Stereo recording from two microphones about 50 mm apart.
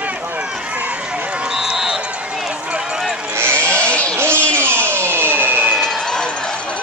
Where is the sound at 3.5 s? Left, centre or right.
Left.